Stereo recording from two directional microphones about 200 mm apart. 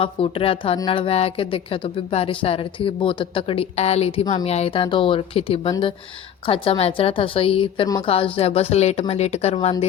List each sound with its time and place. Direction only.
0.0 s a woman's voice: 25° left (ahead or behind)